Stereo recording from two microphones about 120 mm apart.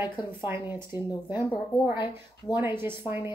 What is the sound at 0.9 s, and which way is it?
Speech, 15° right (ahead or behind).